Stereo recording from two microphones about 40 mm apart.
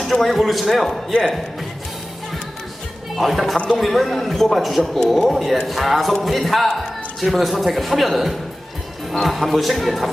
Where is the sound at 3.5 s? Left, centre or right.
Left.